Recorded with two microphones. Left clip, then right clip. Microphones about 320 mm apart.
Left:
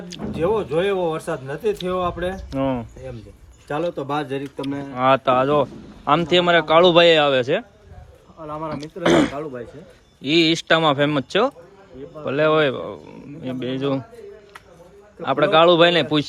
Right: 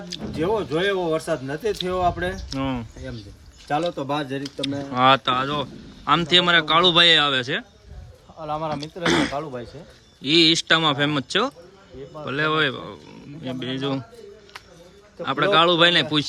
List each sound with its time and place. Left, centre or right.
0.1 s speech: centre
8.4 s speech: centre
9.0 s speech: centre
9.3 s speech: right
10.2 s speech: centre
15.2 s speech: centre